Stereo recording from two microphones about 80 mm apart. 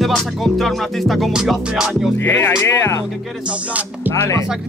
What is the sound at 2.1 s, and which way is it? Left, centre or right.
Speech, left.